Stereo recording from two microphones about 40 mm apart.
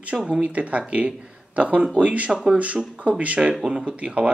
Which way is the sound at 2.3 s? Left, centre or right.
Centre.